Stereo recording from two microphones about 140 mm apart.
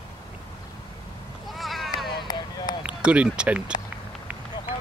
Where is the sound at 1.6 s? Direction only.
Centre (ahead or behind).